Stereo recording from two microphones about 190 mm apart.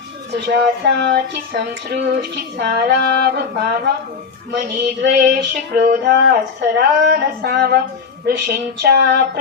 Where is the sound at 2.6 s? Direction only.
55° right (ahead or behind).